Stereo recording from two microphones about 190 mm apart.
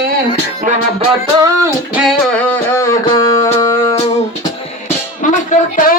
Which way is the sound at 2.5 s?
15° left (ahead or behind).